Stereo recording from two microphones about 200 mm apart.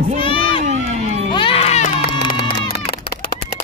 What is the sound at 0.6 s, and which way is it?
Crowd, 35° right (ahead or behind).